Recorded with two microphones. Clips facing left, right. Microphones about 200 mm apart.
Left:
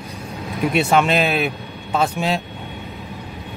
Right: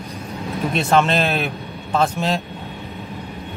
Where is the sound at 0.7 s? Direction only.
10° left (ahead or behind).